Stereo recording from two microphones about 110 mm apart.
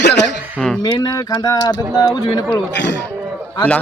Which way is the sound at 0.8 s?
40° left (ahead or behind).